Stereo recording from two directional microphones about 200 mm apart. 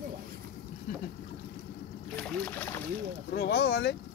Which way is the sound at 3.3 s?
50° left (ahead or behind).